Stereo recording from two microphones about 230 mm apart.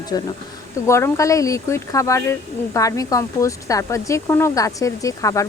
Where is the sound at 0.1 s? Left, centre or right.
Centre.